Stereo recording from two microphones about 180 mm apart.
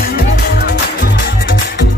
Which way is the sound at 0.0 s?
60° left (ahead or behind).